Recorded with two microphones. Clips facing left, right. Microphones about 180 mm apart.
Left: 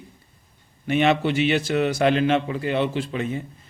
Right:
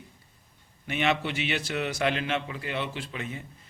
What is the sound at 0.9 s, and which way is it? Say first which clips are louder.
Speech: left 8 dB; 35° left (ahead or behind).